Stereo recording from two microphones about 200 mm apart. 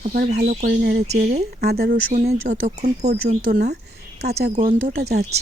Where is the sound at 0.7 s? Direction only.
55° right (ahead or behind).